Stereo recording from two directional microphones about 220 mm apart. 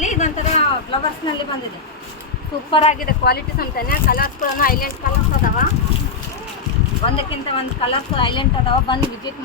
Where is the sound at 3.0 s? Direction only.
45° left (ahead or behind).